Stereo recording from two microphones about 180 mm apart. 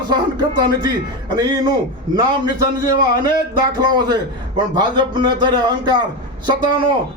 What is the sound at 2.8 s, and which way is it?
A man's voice, 20° right (ahead or behind).